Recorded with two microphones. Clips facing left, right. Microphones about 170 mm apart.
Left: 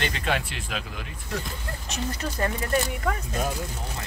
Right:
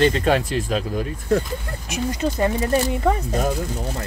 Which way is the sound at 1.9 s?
20° right (ahead or behind).